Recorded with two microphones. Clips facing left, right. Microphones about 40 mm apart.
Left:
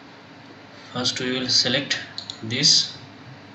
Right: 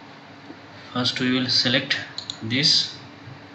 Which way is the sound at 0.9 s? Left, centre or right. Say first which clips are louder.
Right 3 dB; centre.